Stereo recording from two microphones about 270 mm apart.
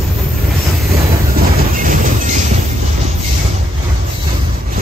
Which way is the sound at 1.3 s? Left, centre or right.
Right.